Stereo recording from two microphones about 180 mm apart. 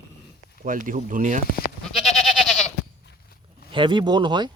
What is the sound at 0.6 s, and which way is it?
Speech, 50° right (ahead or behind).